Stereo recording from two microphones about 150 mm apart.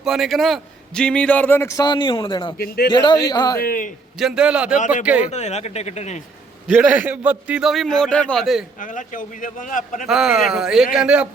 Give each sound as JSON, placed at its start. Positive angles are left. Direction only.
{"t": 0.0, "sound": "a man's voice", "side_deg": 0}
{"t": 2.6, "sound": "a man's voice", "side_deg": 90}
{"t": 2.9, "sound": "a man's voice", "side_deg": 30}
{"t": 3.6, "sound": "a man's voice", "side_deg": 70}
{"t": 4.2, "sound": "a man's voice", "side_deg": -5}
{"t": 5.3, "sound": "speech", "side_deg": 50}
{"t": 6.7, "sound": "a man's voice", "side_deg": -10}
{"t": 8.8, "sound": "a man's voice", "side_deg": 60}
{"t": 10.1, "sound": "a man's voice", "side_deg": -5}